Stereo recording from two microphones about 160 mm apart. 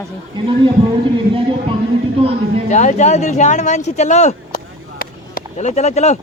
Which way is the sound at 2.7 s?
50° left (ahead or behind).